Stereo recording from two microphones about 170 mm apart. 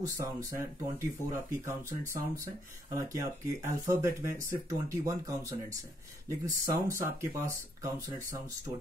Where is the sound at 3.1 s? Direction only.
15° right (ahead or behind).